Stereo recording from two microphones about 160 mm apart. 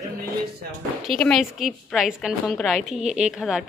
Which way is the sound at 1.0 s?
5° left (ahead or behind).